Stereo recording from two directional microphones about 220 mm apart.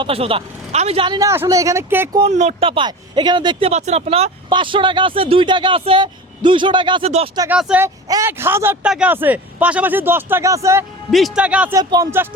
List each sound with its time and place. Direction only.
0.0 s speech: 25° right (ahead or behind)
2.2 s speech: 30° right (ahead or behind)
7.3 s a man's voice: 10° right (ahead or behind)
11.1 s speech: centre (ahead or behind)
11.8 s a man's voice: 15° right (ahead or behind)